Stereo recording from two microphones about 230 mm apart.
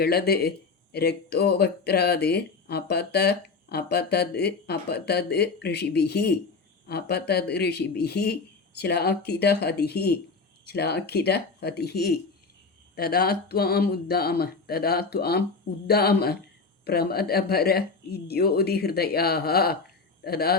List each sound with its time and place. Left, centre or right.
0.0 s speech: left